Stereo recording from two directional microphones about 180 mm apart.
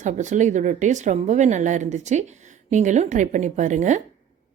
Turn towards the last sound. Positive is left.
turn(degrees=-40)  # may be behind; listen again after turning